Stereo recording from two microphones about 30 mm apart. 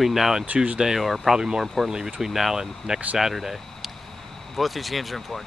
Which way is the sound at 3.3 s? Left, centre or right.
Centre.